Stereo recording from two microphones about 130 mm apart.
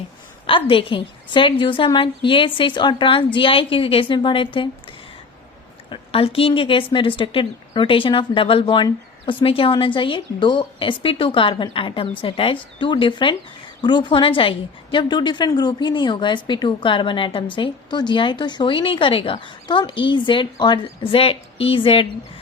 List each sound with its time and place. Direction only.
0.4 s a woman's voice: 40° left (ahead or behind)
5.9 s a woman's voice: 45° left (ahead or behind)